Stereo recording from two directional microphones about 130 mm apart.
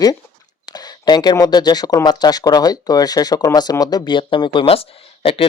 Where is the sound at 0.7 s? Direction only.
30° left (ahead or behind).